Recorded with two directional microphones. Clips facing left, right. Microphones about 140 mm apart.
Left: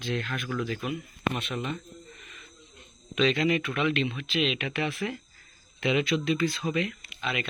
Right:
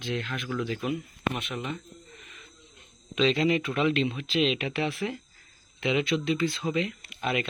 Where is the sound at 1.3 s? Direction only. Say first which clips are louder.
Left 1 dB; 15° right (ahead or behind).